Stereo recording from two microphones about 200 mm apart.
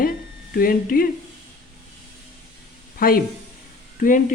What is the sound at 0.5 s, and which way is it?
Speech, 45° left (ahead or behind).